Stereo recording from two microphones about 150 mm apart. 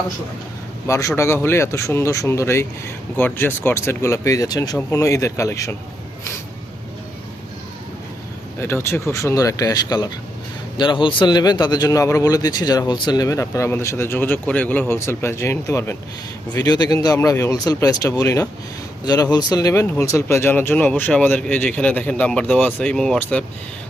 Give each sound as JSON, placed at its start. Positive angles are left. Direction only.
{"t": 0.9, "sound": "speech", "side_deg": 20}
{"t": 8.5, "sound": "speech", "side_deg": 15}
{"t": 16.6, "sound": "speech", "side_deg": 25}